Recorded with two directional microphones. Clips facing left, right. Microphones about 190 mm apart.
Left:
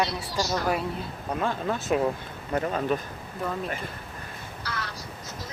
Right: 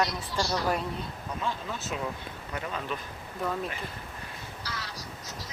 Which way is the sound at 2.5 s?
45° left (ahead or behind).